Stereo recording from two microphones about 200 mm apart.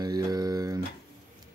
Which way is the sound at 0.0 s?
20° right (ahead or behind).